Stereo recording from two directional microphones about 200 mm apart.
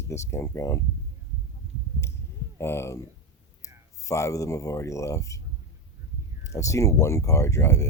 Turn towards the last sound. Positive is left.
turn(degrees=15)  # may be behind; listen again after turning